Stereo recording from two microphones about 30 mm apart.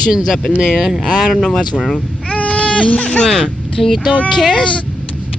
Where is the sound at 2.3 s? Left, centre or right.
Left.